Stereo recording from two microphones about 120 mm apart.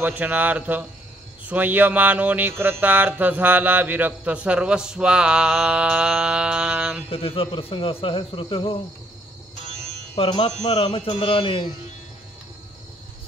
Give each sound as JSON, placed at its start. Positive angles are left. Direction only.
{"t": 0.0, "sound": "mantra", "side_deg": -15}
{"t": 7.1, "sound": "speech", "side_deg": 50}
{"t": 10.2, "sound": "speech", "side_deg": 50}